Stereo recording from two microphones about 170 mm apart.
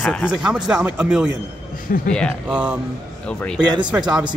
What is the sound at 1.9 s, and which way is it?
Speech, 55° left (ahead or behind).